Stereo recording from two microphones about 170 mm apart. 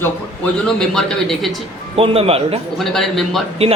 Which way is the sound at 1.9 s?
35° right (ahead or behind).